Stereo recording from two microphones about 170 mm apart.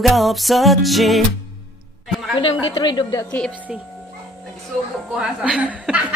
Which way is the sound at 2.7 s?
25° left (ahead or behind).